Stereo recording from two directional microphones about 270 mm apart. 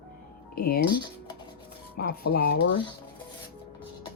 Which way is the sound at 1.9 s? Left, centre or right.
Left.